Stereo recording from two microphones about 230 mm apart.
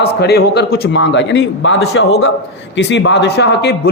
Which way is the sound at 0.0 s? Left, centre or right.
Left.